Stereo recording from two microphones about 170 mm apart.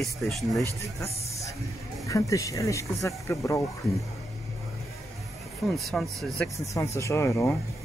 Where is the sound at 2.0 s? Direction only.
20° left (ahead or behind).